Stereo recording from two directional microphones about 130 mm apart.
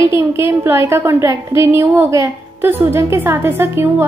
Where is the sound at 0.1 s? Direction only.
20° right (ahead or behind).